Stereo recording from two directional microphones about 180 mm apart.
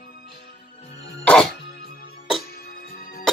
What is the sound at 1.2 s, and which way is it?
Music, 5° left (ahead or behind).